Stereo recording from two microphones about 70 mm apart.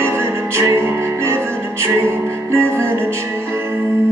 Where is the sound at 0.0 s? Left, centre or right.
Right.